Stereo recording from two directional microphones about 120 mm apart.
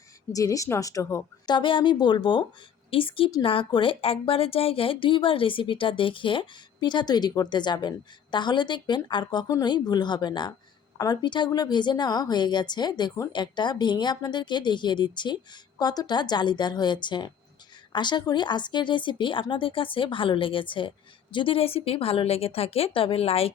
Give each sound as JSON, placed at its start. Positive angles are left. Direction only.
{"t": 0.3, "sound": "a woman's voice", "side_deg": 25}
{"t": 1.5, "sound": "speech", "side_deg": 40}